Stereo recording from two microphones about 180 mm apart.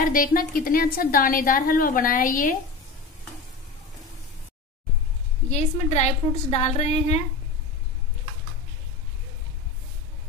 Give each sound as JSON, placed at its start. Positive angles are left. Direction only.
{"t": 0.0, "sound": "a woman's voice", "side_deg": 50}
{"t": 5.5, "sound": "a woman's voice", "side_deg": 40}